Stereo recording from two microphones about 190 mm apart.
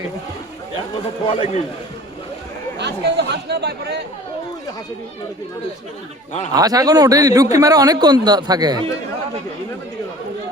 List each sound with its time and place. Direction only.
1.3 s a man's voice: 30° left (ahead or behind)
2.7 s speech: 65° right (ahead or behind)
6.5 s a man's voice: 20° right (ahead or behind)